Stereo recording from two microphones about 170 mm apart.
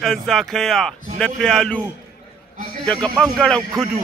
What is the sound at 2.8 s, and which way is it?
A man's voice, 10° left (ahead or behind).